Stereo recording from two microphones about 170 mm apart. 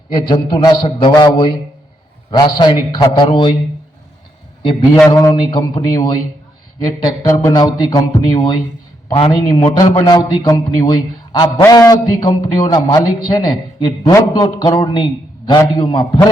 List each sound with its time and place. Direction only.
0.2 s a man's voice: 25° left (ahead or behind)
5.0 s a man's voice: 20° left (ahead or behind)